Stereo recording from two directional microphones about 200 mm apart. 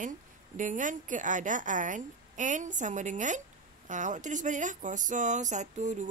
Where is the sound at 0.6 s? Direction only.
40° right (ahead or behind).